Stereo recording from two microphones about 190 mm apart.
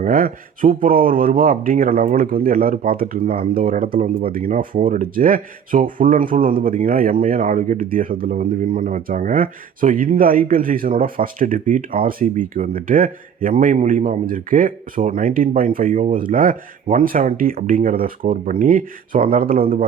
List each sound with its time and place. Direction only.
0.0 s speech: 50° right (ahead or behind)